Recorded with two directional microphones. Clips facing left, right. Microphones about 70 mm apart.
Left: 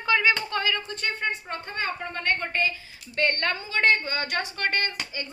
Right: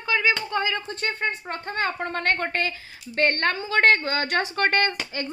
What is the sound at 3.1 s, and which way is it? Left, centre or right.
Speech, right.